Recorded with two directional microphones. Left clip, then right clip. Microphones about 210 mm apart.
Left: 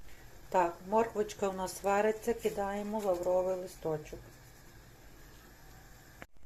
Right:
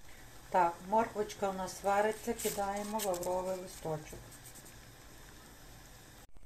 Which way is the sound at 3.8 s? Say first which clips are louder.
Left 3 dB; 15° left (ahead or behind).